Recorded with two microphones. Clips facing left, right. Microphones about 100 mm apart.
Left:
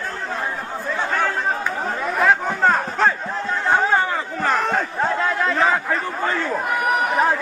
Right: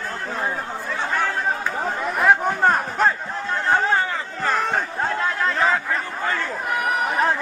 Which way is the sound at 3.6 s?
15° left (ahead or behind).